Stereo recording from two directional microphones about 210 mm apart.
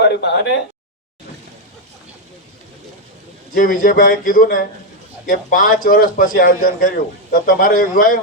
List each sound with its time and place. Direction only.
0.0 s speech: 55° left (ahead or behind)
3.5 s a man's voice: 40° left (ahead or behind)